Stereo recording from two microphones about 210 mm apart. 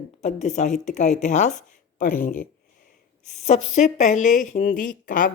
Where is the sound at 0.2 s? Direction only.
35° left (ahead or behind).